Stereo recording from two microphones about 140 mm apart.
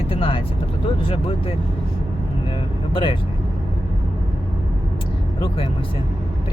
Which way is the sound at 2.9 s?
35° left (ahead or behind).